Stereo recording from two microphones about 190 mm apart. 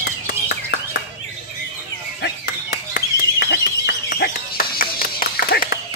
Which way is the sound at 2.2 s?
55° left (ahead or behind).